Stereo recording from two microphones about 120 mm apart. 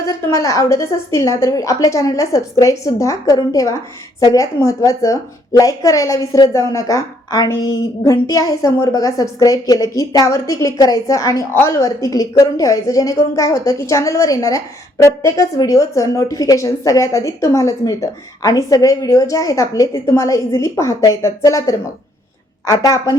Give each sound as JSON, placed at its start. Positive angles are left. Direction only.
{"t": 0.0, "sound": "a woman's voice", "side_deg": 25}